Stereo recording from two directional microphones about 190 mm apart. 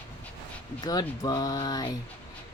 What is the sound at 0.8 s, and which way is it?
Speech, 20° left (ahead or behind).